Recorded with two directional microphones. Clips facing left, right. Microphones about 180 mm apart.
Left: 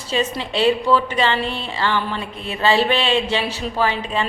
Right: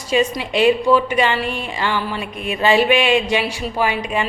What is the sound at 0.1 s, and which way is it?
A woman's voice, 15° right (ahead or behind).